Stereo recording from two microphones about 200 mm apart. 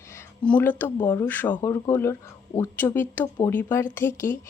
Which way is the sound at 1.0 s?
10° left (ahead or behind).